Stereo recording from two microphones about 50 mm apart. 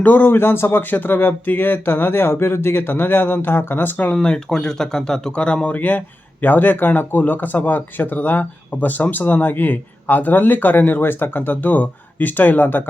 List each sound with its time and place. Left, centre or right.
0.0 s speech: left
4.1 s speech: centre
5.6 s speech: left